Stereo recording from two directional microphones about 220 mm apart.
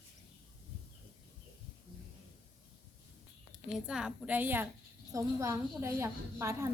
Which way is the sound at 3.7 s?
5° right (ahead or behind).